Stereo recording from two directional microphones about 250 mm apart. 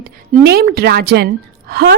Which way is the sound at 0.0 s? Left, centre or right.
Right.